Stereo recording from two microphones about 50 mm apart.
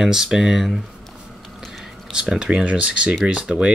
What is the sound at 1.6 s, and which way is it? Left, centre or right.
Whispering, centre.